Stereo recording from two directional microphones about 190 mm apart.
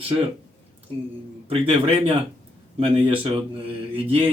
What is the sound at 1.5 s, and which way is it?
A man's voice, 30° right (ahead or behind).